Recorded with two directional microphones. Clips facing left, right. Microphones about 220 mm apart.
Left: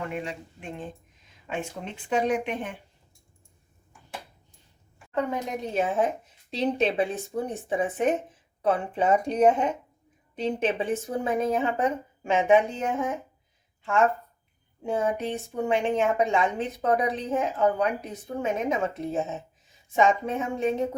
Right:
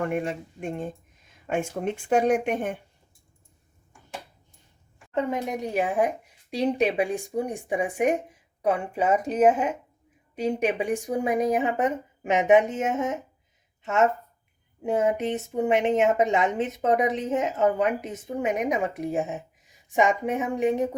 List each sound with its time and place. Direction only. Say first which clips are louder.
0.0 s speech: right 6 dB; 50° right (ahead or behind)
5.1 s a woman's voice: right 2 dB; 20° right (ahead or behind)